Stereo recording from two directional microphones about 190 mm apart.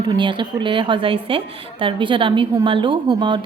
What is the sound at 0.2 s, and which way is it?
A woman's voice, 25° right (ahead or behind).